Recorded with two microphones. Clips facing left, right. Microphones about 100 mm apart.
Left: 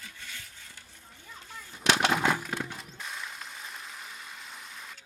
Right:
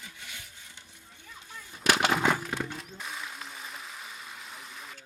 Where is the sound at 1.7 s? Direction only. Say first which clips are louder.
Even; 10° right (ahead or behind).